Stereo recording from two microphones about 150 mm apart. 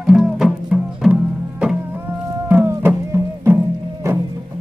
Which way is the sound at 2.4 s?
15° right (ahead or behind).